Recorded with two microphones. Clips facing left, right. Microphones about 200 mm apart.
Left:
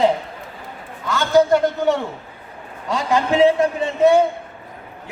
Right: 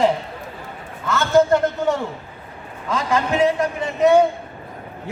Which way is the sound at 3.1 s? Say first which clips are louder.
Left 4 dB; 25° left (ahead or behind).